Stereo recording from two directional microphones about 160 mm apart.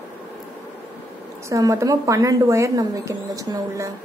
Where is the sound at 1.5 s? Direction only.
20° right (ahead or behind).